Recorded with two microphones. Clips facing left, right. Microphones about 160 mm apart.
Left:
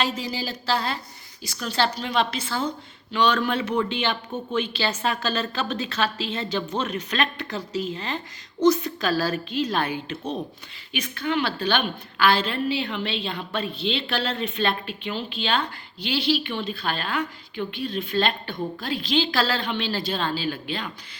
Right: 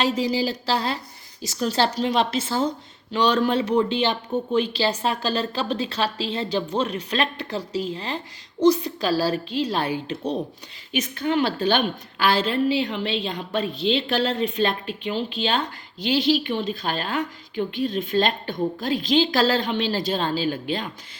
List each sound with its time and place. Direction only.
0.0 s a woman's voice: 35° right (ahead or behind)